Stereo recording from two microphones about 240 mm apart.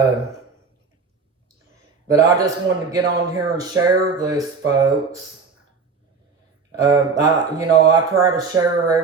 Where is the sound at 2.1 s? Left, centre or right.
Centre.